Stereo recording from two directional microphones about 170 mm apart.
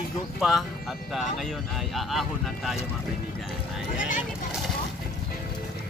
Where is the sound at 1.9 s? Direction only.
Centre (ahead or behind).